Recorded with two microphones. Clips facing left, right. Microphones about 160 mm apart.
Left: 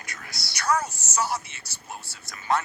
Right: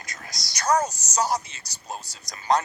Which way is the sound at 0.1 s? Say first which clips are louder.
Even; 40° right (ahead or behind).